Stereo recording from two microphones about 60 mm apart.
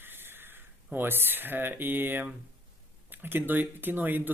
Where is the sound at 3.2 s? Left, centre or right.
Right.